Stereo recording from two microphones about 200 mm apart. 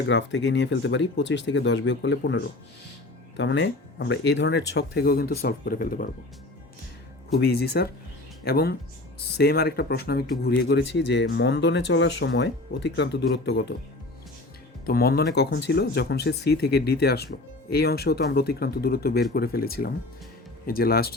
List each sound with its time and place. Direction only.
0.1 s speech: 65° left (ahead or behind); by 6.1 s 45° left (ahead or behind)
7.3 s speech: 55° left (ahead or behind)
14.8 s speech: 50° left (ahead or behind)